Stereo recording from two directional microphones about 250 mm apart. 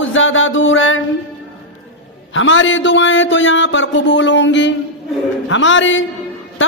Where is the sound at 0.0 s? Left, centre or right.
Left.